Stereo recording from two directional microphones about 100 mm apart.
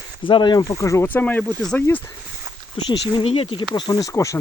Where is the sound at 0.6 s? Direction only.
35° left (ahead or behind).